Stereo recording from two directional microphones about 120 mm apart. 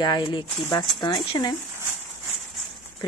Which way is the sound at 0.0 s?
40° left (ahead or behind).